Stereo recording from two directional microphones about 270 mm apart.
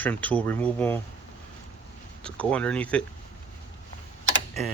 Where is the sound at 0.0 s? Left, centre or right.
Centre.